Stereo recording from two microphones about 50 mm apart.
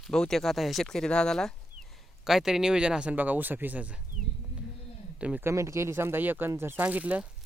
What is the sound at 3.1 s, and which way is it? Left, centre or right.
Speech, right.